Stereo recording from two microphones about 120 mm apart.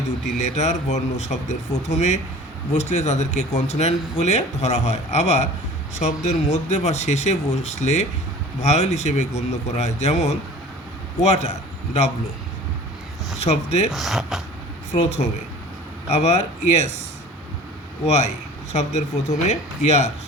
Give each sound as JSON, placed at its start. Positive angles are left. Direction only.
{"t": 0.4, "sound": "speech", "side_deg": 75}
{"t": 13.4, "sound": "speech", "side_deg": 65}
{"t": 13.9, "sound": "speech", "side_deg": 0}
{"t": 14.9, "sound": "speech", "side_deg": 65}
{"t": 18.0, "sound": "speech", "side_deg": 65}